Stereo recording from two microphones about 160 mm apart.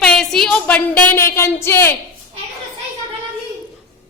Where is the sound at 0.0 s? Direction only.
5° left (ahead or behind).